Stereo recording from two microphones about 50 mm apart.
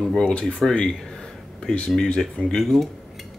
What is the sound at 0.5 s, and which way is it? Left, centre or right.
Speech, centre.